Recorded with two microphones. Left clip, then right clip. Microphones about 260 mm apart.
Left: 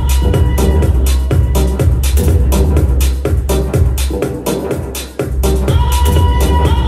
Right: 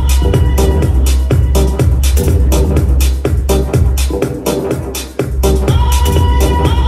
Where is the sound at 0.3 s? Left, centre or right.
Right.